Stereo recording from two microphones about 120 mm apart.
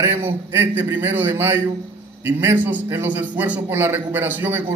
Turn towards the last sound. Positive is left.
turn(degrees=-15)  # may be behind; listen again after turning